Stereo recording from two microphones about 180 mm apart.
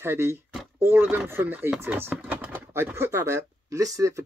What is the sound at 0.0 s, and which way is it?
Speech, 15° right (ahead or behind).